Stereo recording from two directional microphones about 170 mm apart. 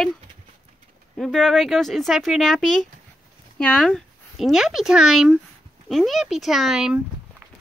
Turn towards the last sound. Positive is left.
turn(degrees=-5)  # may be behind; listen again after turning